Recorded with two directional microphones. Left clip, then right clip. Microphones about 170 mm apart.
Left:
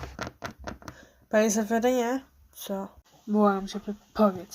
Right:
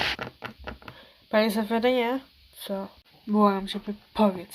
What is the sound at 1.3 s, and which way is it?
Speech, 10° left (ahead or behind).